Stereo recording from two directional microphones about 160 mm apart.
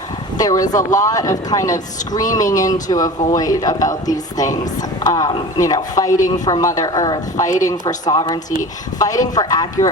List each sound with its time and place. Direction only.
0.3 s speech: 25° left (ahead or behind)